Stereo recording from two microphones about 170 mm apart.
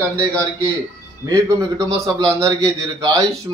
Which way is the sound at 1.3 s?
20° right (ahead or behind).